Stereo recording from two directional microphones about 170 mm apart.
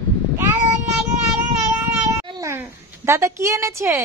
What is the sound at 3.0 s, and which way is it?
Speech, 15° right (ahead or behind).